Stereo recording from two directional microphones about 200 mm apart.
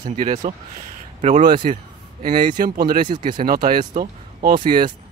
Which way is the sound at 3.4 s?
45° right (ahead or behind).